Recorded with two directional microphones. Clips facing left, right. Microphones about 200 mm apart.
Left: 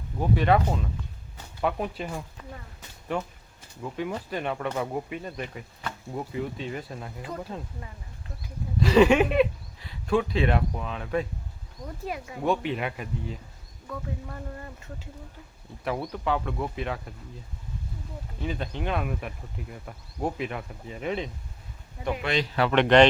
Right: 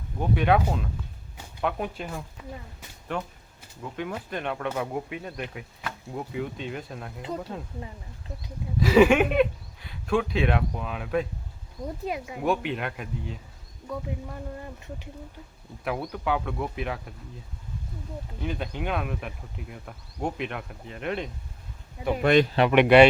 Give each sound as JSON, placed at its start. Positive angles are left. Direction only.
{"t": 0.2, "sound": "speech", "side_deg": 0}
{"t": 4.3, "sound": "speech", "side_deg": 5}
{"t": 8.8, "sound": "speech", "side_deg": -5}
{"t": 12.0, "sound": "speech", "side_deg": -20}
{"t": 12.4, "sound": "speech", "side_deg": 0}
{"t": 13.8, "sound": "speech", "side_deg": -10}
{"t": 15.8, "sound": "speech", "side_deg": 0}
{"t": 18.3, "sound": "speech", "side_deg": 0}
{"t": 22.1, "sound": "speech", "side_deg": -50}
{"t": 22.5, "sound": "speech", "side_deg": -15}